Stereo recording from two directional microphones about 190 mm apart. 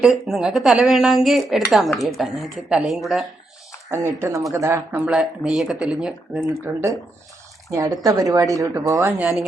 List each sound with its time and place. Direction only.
0.0 s speech: centre (ahead or behind)
3.8 s a woman's voice: 15° right (ahead or behind)
7.7 s a woman's voice: 15° right (ahead or behind)